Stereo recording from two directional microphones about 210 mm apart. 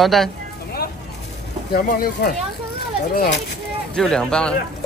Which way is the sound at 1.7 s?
45° left (ahead or behind).